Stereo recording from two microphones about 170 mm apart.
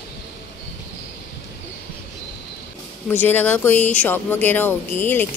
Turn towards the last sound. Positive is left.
turn(degrees=10)  # may be behind; listen again after turning